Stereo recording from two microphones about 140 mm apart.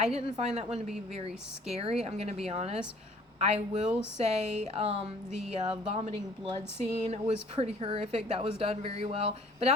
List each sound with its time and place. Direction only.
0.0 s speech: 50° right (ahead or behind); by 6.6 s 35° right (ahead or behind)
7.1 s speech: 50° right (ahead or behind)